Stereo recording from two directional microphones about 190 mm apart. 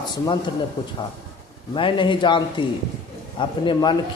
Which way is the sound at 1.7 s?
25° left (ahead or behind).